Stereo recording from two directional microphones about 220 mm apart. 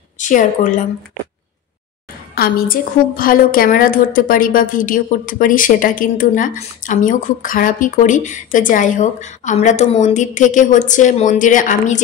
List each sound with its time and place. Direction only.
0.2 s a woman's voice: 35° left (ahead or behind)
2.3 s a woman's voice: 40° left (ahead or behind)